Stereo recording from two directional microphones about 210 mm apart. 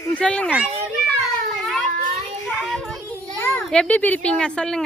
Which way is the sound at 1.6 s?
Centre (ahead or behind).